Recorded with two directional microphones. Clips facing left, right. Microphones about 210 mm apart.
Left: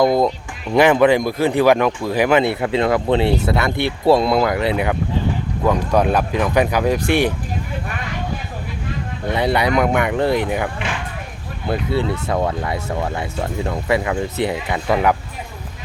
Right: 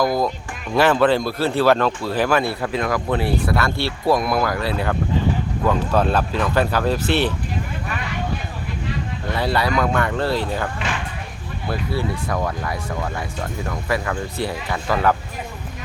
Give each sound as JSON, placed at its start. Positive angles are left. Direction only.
{"t": 0.0, "sound": "speech", "side_deg": 25}
{"t": 9.3, "sound": "speech", "side_deg": 20}
{"t": 11.7, "sound": "speech", "side_deg": 25}